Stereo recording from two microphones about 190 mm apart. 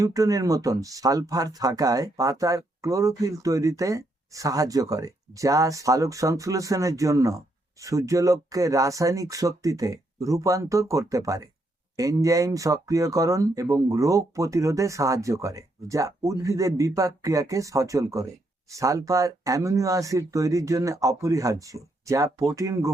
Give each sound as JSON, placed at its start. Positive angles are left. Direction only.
{"t": 0.0, "sound": "speech", "side_deg": -20}